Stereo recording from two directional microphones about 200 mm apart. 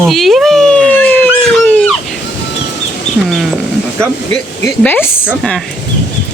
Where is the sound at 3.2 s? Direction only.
Centre (ahead or behind).